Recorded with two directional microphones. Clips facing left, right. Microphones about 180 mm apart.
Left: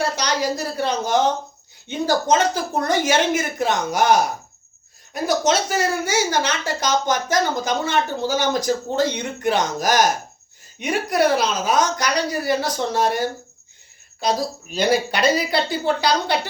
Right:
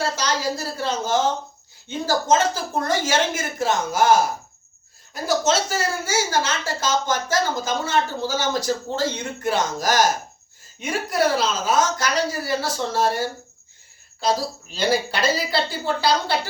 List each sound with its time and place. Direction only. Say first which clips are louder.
0.0 s a woman's voice: left 2 dB; 15° left (ahead or behind)
5.2 s a woman's voice: left 1 dB; 20° left (ahead or behind)